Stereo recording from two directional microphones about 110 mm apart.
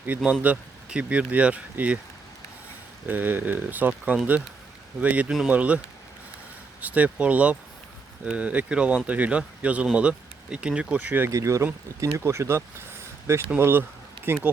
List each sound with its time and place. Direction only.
0.2 s speech: 10° right (ahead or behind)
3.1 s speech: 15° right (ahead or behind)
6.8 s speech: 15° right (ahead or behind)
11.3 s speech: 30° right (ahead or behind)